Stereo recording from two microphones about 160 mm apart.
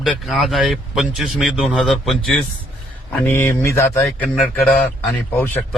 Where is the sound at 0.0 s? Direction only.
Centre (ahead or behind).